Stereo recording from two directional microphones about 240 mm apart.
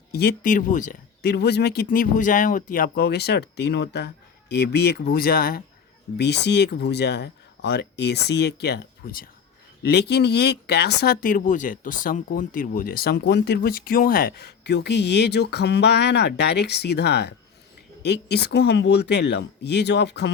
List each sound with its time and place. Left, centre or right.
0.1 s speech: left